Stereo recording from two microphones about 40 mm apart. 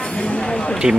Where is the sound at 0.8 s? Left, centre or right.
Right.